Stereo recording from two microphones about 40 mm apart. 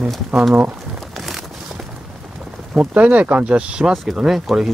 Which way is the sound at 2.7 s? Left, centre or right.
Right.